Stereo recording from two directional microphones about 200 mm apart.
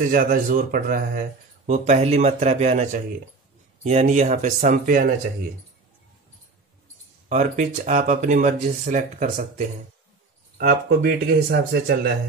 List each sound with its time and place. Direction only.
0.1 s speech: 45° right (ahead or behind)
1.7 s speech: 35° right (ahead or behind)
7.2 s speech: 40° right (ahead or behind)